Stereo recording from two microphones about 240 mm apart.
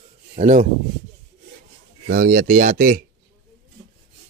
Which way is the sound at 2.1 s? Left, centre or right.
Right.